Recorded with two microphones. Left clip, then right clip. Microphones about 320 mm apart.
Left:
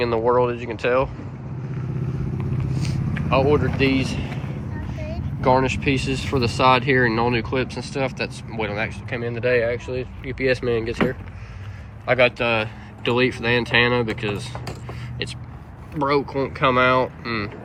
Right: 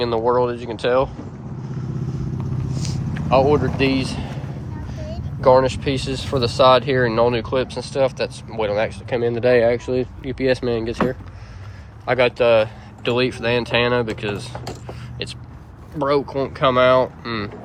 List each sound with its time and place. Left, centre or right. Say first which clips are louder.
0.0 s speech: right 1 dB; centre
2.7 s speech: even; centre
5.4 s speech: right 4 dB; centre
14.6 s a sound: right 2 dB; right
16.0 s speech: right 1 dB; centre